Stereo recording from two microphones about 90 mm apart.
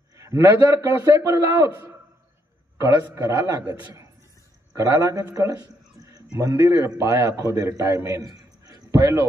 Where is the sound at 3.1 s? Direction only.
40° right (ahead or behind).